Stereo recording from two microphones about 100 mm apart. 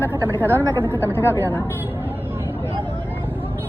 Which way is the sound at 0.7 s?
25° left (ahead or behind).